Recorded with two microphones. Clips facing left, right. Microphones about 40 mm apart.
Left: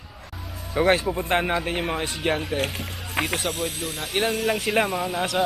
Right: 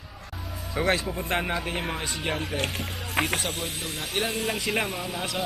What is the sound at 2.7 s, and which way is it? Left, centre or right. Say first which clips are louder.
Speech: even; centre.